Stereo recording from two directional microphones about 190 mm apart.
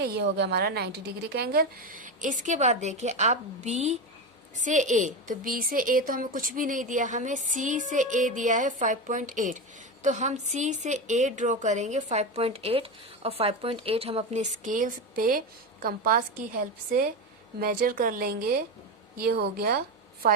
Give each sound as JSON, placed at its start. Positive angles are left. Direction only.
{"t": 0.0, "sound": "a woman's voice", "side_deg": -60}
{"t": 17.6, "sound": "a woman's voice", "side_deg": -50}